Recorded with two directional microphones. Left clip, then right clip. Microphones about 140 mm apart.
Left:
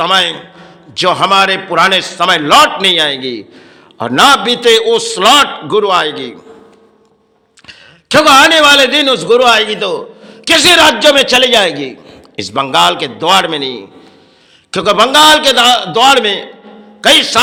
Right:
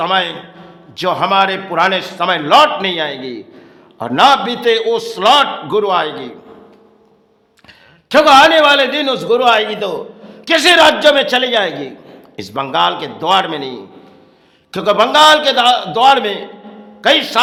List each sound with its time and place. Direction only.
0.1 s a man's voice: 20° left (ahead or behind)
7.7 s a man's voice: 15° left (ahead or behind)
10.6 s a man's voice: 10° left (ahead or behind)
12.0 s a sound: 15° left (ahead or behind)
12.7 s a man's voice: 25° left (ahead or behind)